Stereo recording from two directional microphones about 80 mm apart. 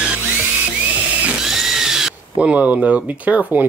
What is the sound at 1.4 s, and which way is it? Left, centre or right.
Drill, centre.